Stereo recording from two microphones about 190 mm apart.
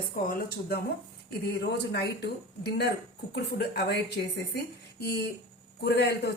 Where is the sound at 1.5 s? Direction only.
60° left (ahead or behind).